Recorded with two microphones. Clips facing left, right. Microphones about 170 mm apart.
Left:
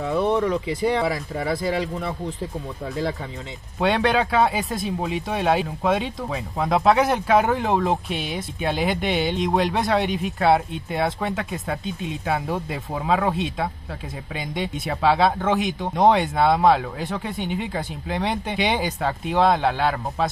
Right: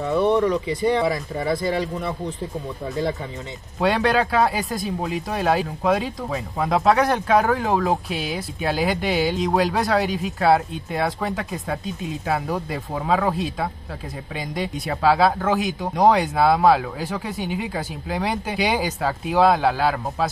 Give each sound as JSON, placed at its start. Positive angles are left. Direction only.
{"t": 0.0, "sound": "speech", "side_deg": 0}